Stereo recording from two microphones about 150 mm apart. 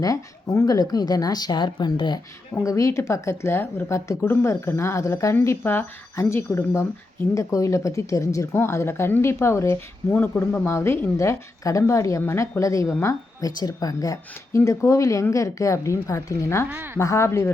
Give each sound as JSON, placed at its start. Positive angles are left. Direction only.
{"t": 0.0, "sound": "speech", "side_deg": 20}
{"t": 16.7, "sound": "a woman's voice", "side_deg": -15}
{"t": 17.0, "sound": "speech", "side_deg": 20}